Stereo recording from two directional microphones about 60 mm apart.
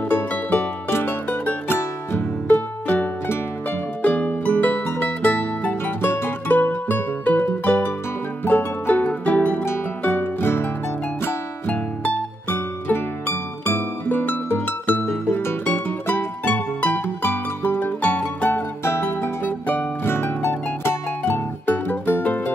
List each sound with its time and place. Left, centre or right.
0.1 s music: left
10.4 s music: left
11.6 s music: left
18.5 s music: left
21.6 s music: left